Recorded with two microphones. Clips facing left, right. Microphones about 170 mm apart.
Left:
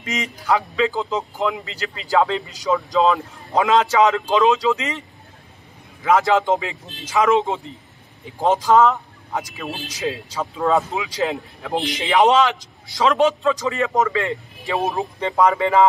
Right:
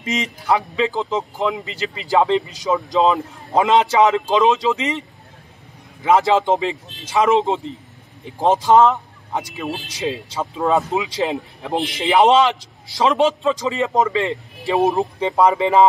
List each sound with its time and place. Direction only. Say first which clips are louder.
0.0 s speech: right 3 dB; 20° right (ahead or behind)
6.0 s speech: right 1 dB; 20° right (ahead or behind)
8.4 s speech: right 2 dB; 20° right (ahead or behind)